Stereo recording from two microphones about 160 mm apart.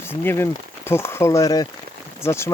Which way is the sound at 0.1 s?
15° left (ahead or behind).